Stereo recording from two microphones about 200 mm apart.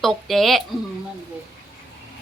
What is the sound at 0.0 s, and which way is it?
Speech, centre (ahead or behind).